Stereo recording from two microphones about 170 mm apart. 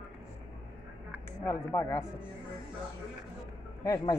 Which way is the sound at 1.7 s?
15° left (ahead or behind).